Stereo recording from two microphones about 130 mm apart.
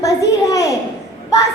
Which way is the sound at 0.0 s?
25° left (ahead or behind).